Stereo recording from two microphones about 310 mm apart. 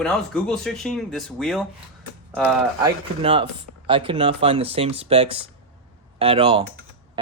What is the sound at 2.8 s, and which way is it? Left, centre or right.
Speech, centre.